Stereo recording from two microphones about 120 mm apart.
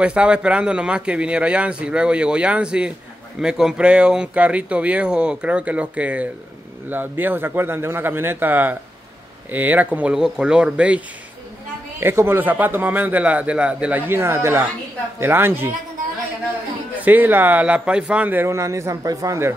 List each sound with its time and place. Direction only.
0.0 s speech: 10° right (ahead or behind)
12.0 s speech: 20° right (ahead or behind)
17.0 s speech: 15° right (ahead or behind)